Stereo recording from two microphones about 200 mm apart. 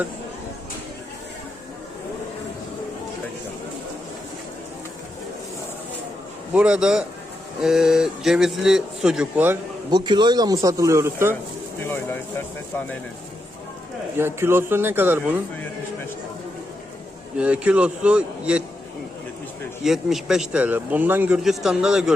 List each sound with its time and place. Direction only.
6.5 s speech: 5° right (ahead or behind)
9.9 s speech: 20° right (ahead or behind)
14.2 s speech: 10° right (ahead or behind)
17.3 s speech: 5° right (ahead or behind)
19.8 s speech: centre (ahead or behind)